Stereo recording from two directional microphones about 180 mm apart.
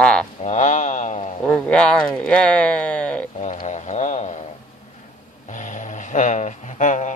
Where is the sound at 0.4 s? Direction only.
40° left (ahead or behind).